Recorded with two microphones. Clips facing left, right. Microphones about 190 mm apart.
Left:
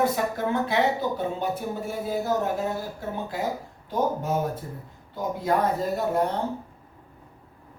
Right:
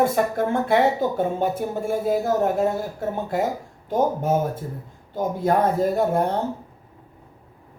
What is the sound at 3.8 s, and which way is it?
Speech, 50° right (ahead or behind).